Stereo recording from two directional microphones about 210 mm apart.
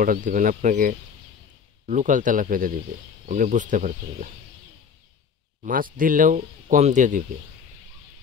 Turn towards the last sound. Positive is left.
turn(degrees=-35)  # may be behind; listen again after turning